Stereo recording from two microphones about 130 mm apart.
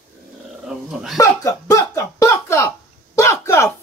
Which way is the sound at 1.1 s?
25° left (ahead or behind).